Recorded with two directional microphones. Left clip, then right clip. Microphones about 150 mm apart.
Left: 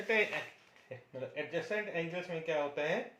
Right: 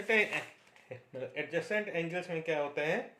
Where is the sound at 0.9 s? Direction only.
65° right (ahead or behind).